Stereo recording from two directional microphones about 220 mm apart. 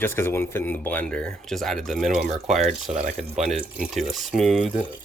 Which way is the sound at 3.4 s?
Centre (ahead or behind).